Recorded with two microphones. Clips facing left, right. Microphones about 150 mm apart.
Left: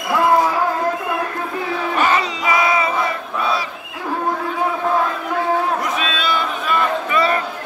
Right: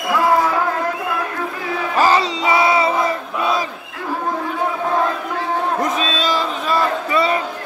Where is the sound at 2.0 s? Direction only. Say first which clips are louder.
Right 4 dB; 35° right (ahead or behind).